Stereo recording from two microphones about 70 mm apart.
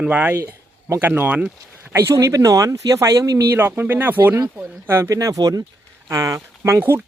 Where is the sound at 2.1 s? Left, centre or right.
Right.